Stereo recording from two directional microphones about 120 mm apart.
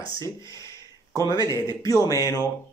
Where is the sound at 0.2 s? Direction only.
25° left (ahead or behind).